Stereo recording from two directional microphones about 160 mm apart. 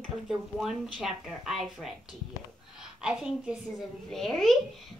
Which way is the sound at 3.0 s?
5° right (ahead or behind).